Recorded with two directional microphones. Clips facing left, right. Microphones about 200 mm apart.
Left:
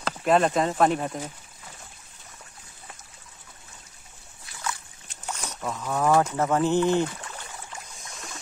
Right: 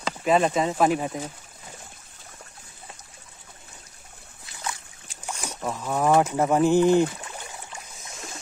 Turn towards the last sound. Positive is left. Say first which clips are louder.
# right 4 dB
turn(degrees=-15)  # may be behind; listen again after turning